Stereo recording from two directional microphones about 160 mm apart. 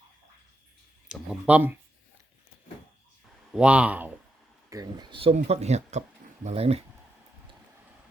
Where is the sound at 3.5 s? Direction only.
5° right (ahead or behind).